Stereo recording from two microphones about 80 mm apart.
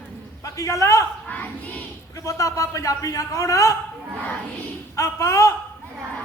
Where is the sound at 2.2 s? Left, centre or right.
Left.